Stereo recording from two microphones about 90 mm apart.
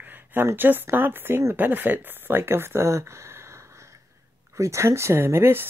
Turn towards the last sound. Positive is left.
turn(degrees=-25)  # may be behind; listen again after turning